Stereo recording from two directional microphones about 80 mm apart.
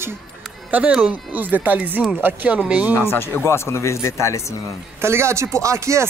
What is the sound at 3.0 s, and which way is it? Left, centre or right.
Speech, left.